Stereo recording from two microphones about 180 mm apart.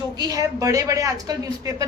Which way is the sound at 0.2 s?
20° right (ahead or behind).